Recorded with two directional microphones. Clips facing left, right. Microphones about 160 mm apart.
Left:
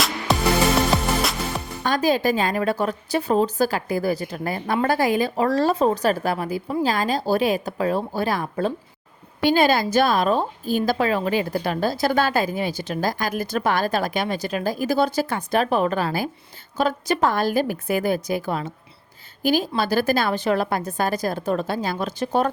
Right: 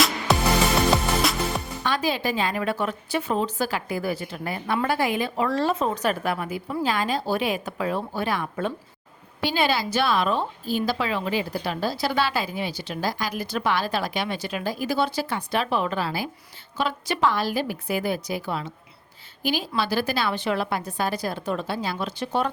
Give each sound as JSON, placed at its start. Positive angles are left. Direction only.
{"t": 1.2, "sound": "music", "side_deg": 0}
{"t": 1.8, "sound": "a woman's voice", "side_deg": 45}
{"t": 9.4, "sound": "a woman's voice", "side_deg": 50}